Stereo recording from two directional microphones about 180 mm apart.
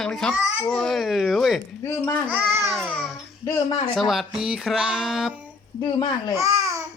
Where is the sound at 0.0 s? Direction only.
5° left (ahead or behind).